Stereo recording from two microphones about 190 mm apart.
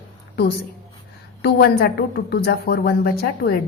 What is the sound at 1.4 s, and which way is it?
A woman's voice, 55° left (ahead or behind).